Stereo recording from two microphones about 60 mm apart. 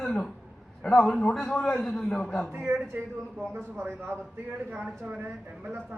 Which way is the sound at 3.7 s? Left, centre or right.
Right.